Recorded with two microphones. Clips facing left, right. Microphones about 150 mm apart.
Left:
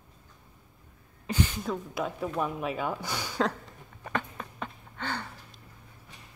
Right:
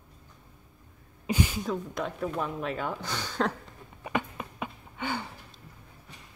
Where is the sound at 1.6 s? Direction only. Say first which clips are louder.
Even; 5° left (ahead or behind).